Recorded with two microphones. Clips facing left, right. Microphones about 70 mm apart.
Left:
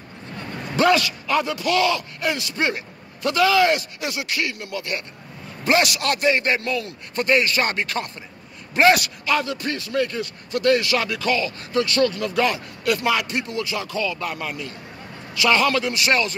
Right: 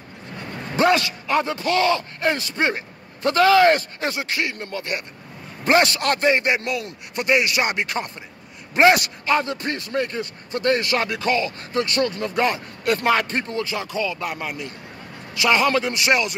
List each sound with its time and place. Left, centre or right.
0.7 s a man's voice: right